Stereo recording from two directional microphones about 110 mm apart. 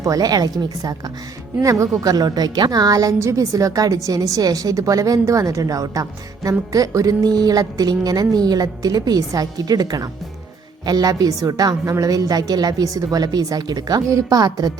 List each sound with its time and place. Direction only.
0.0 s a woman's voice: 35° right (ahead or behind)